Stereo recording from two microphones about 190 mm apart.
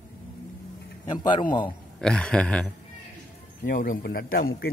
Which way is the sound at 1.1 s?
25° left (ahead or behind).